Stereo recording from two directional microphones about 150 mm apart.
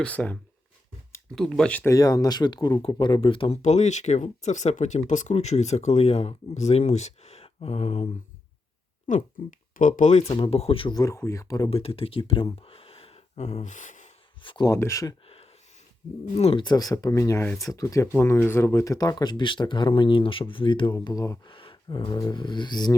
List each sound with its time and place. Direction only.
0.0 s speech: 10° left (ahead or behind)
1.9 s speech: 25° left (ahead or behind)
3.6 s speech: 50° left (ahead or behind)
9.0 s speech: 60° left (ahead or behind); by 10.9 s 35° left (ahead or behind)
10.9 s speech: 20° left (ahead or behind)
11.7 s speech: 40° left (ahead or behind)
12.6 s gasp: 40° left (ahead or behind); by 14.1 s 55° left (ahead or behind)
14.4 s speech: 30° left (ahead or behind)
14.7 s speech: 20° left (ahead or behind)
16.3 s speech: 40° left (ahead or behind)
16.6 s speech: 25° left (ahead or behind)
21.5 s speech: 35° left (ahead or behind)